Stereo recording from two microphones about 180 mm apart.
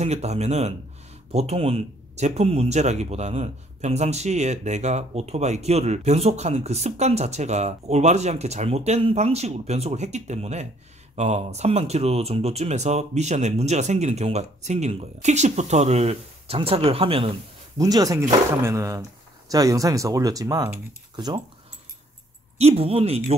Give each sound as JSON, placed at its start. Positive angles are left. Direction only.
{"t": 0.0, "sound": "speech", "side_deg": -35}
{"t": 17.7, "sound": "speech", "side_deg": -20}
{"t": 22.6, "sound": "speech", "side_deg": -35}